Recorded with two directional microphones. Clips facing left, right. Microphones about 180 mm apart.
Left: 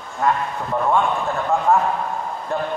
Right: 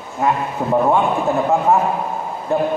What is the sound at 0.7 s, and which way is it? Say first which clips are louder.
A man's voice: right 3 dB; 20° right (ahead or behind).